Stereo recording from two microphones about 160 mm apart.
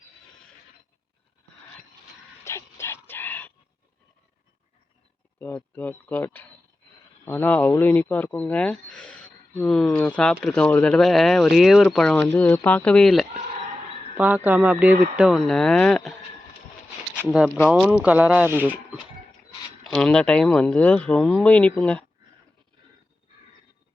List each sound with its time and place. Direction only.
2.4 s dog: 15° left (ahead or behind)
5.4 s speech: 10° left (ahead or behind)
14.2 s speech: 10° right (ahead or behind)
17.2 s speech: 5° right (ahead or behind)
19.8 s speech: 5° left (ahead or behind)